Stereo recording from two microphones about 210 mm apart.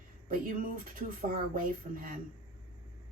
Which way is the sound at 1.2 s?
45° right (ahead or behind).